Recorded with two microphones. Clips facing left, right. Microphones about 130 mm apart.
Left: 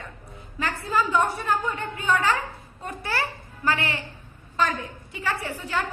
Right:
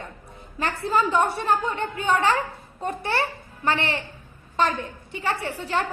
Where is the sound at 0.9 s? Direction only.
30° right (ahead or behind).